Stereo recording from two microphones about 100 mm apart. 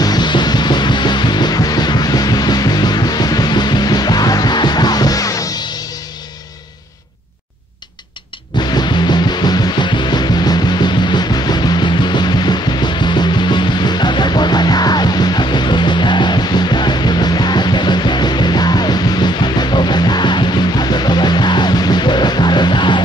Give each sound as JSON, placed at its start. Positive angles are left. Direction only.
{"t": 0.0, "sound": "music", "side_deg": 45}
{"t": 8.7, "sound": "music", "side_deg": 45}